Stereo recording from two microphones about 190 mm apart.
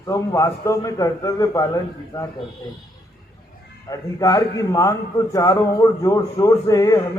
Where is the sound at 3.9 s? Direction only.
20° left (ahead or behind).